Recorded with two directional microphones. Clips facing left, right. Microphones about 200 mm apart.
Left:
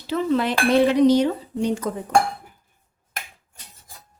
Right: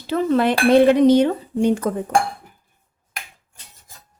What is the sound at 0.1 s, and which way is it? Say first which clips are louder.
Dishes: right 3 dB; 50° right (ahead or behind).